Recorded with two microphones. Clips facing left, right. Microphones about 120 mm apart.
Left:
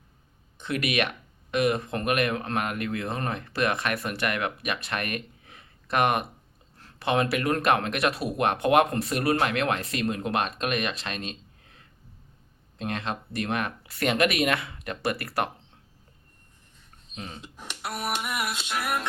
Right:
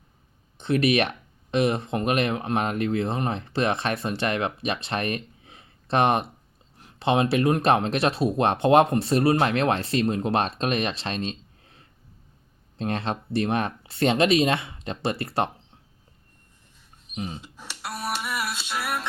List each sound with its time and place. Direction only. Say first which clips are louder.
0.6 s speech: right 6 dB; 30° right (ahead or behind)
17.1 s speech: right 6 dB; 15° right (ahead or behind)
17.6 s music: left 1 dB; 20° left (ahead or behind)